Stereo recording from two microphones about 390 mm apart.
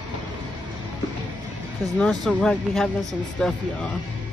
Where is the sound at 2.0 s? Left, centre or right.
Centre.